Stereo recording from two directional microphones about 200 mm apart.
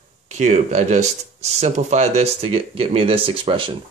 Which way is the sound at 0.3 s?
35° right (ahead or behind).